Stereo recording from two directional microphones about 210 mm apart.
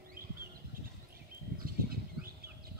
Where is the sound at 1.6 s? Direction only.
45° right (ahead or behind).